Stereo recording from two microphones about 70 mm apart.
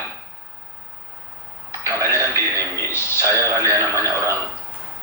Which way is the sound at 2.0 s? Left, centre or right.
Left.